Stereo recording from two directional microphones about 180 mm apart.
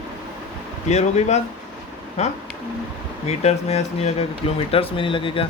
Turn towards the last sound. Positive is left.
turn(degrees=30)  # may be behind; listen again after turning